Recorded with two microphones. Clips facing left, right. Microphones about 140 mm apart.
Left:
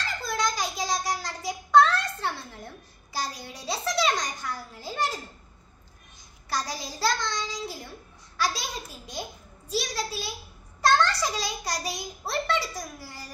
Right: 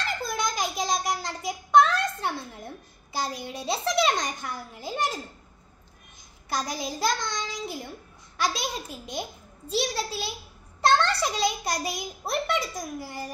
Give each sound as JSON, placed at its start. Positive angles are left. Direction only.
{"t": 0.4, "sound": "child singing", "side_deg": -20}
{"t": 2.1, "sound": "a child's voice", "side_deg": -20}
{"t": 6.5, "sound": "a child's voice", "side_deg": -20}